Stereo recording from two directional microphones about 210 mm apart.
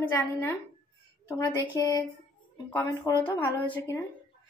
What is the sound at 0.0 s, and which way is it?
Speech, 10° left (ahead or behind).